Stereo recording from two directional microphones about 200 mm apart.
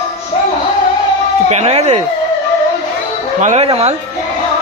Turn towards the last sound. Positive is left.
turn(degrees=-30)  # may be behind; listen again after turning